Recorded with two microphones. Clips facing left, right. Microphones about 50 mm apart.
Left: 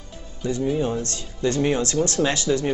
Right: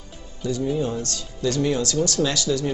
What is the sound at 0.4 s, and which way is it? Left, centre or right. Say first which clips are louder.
Speech: left 1 dB; left.